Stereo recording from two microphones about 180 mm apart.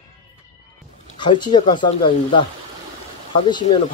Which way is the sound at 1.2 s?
25° left (ahead or behind).